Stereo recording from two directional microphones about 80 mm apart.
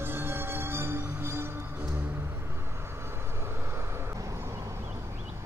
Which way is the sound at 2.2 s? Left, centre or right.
Right.